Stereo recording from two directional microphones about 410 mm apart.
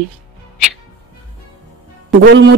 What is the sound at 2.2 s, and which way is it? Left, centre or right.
Speech, right.